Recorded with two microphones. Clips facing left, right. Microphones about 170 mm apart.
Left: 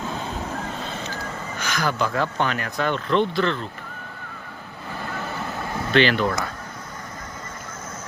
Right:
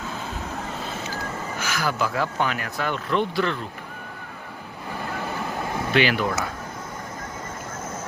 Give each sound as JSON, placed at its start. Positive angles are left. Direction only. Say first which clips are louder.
{"t": 1.5, "sound": "speech", "louder": "left 2 dB", "side_deg": -5}
{"t": 5.9, "sound": "speech", "louder": "left 3 dB", "side_deg": -10}